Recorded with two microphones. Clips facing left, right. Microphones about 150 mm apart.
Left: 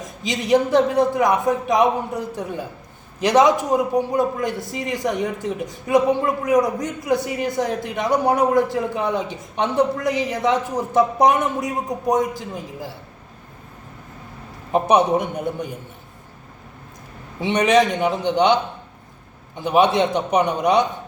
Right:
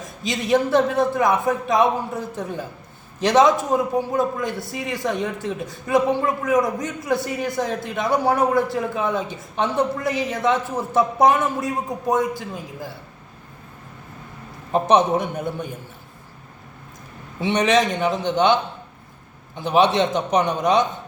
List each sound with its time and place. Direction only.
0.2 s a man's voice: 15° left (ahead or behind)
14.7 s a man's voice: 10° left (ahead or behind)
17.4 s a man's voice: 10° left (ahead or behind)